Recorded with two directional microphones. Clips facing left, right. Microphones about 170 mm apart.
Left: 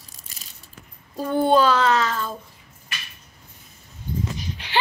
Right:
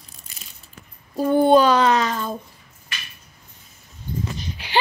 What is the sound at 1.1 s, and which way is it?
Child singing, 15° right (ahead or behind).